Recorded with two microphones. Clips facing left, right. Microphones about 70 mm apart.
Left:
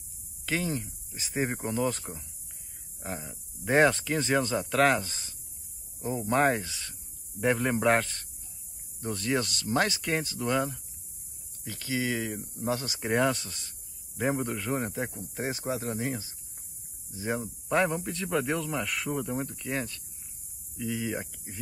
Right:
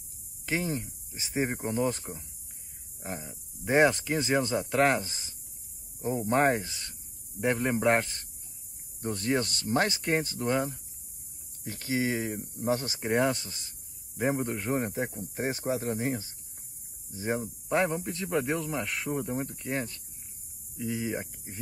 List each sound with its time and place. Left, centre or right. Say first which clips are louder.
0.5 s speech: even; centre
3.0 s speech: left 1 dB; centre
6.0 s speech: even; right
6.7 s a man's voice: left 1 dB; centre
9.0 s speech: right 1 dB; right
11.6 s speech: right 2 dB; right
13.1 s speech: even; centre
14.5 s speech: right 1 dB; right
15.0 s speech: right 1 dB; left
15.3 s speech: right 2 dB; right
17.6 s a man's voice: left 1 dB; centre
19.0 s speech: even; right
20.7 s speech: even; centre